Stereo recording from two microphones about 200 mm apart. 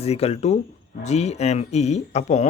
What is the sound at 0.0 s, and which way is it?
Speech, 30° left (ahead or behind).